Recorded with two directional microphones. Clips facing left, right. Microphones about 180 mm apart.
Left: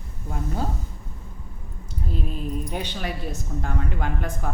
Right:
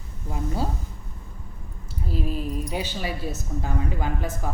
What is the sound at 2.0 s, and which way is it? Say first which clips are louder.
Speech: right 2 dB; 5° right (ahead or behind).